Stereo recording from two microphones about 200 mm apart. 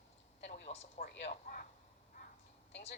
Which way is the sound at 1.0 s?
45° left (ahead or behind).